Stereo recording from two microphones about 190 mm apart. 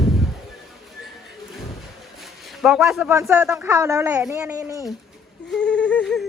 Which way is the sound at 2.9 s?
15° right (ahead or behind).